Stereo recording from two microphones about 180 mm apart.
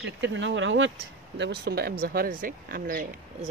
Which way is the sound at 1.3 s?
70° right (ahead or behind).